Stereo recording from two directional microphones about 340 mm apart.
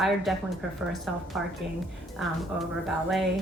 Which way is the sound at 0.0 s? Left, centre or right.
Centre.